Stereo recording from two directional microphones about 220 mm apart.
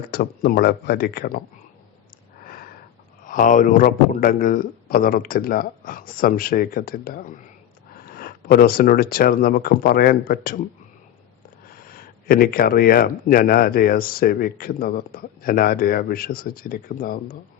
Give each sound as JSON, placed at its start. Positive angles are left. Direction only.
{"t": 0.1, "sound": "speech", "side_deg": 45}
{"t": 2.4, "sound": "sniff", "side_deg": 40}
{"t": 3.2, "sound": "speech", "side_deg": 35}
{"t": 11.8, "sound": "speech", "side_deg": 40}